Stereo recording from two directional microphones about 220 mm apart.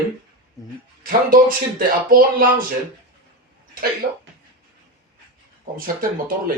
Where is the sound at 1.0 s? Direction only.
40° right (ahead or behind).